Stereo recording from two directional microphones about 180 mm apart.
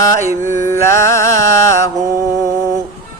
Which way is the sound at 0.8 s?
15° left (ahead or behind).